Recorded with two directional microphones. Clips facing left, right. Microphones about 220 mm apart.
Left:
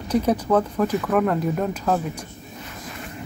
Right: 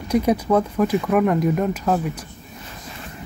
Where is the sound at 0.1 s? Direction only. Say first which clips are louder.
Right 1 dB; 10° right (ahead or behind).